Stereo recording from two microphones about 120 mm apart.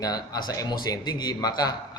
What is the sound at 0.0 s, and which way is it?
A man's voice, 35° left (ahead or behind).